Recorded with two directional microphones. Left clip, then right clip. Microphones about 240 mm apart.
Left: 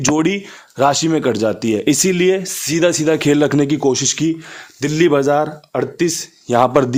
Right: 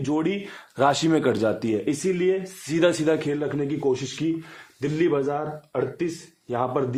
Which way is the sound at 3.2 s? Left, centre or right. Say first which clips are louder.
Left 12 dB; left.